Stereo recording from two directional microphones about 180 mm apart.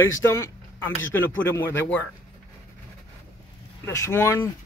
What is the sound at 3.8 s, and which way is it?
Speech, 15° left (ahead or behind).